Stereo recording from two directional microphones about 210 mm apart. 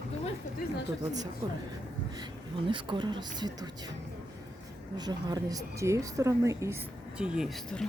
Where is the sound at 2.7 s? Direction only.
25° right (ahead or behind).